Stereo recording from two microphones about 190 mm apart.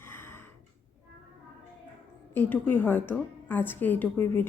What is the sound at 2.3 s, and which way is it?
Speech, 10° left (ahead or behind).